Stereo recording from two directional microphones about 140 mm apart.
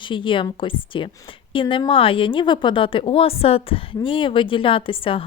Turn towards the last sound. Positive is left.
turn(degrees=40)  # may be behind; listen again after turning